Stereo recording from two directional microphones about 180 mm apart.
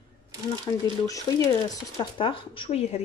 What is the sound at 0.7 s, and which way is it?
Speech, 25° left (ahead or behind).